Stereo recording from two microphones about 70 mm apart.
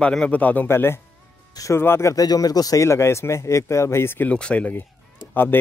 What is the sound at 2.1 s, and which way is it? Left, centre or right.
Speech, left.